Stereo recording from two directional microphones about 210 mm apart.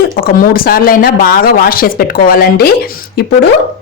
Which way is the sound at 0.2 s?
45° left (ahead or behind).